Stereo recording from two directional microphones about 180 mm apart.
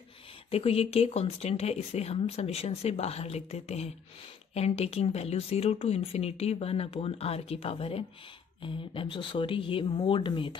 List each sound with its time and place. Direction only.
0.5 s speech: 35° left (ahead or behind)